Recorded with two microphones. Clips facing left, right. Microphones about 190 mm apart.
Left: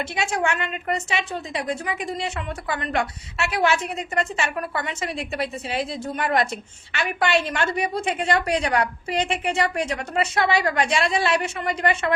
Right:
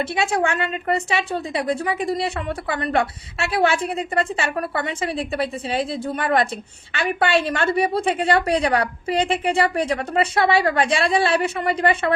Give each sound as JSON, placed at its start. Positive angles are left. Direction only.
{"t": 0.0, "sound": "a woman's voice", "side_deg": -35}